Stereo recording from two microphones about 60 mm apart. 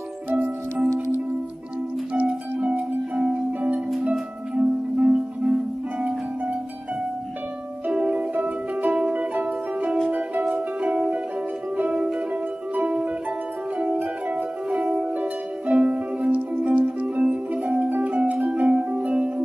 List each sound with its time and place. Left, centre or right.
0.3 s music: right
2.1 s music: right
7.8 s music: right